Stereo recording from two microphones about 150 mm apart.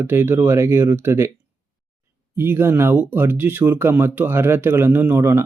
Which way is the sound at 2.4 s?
15° right (ahead or behind).